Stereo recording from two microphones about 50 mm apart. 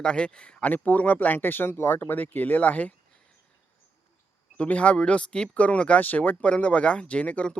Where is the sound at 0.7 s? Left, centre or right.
Left.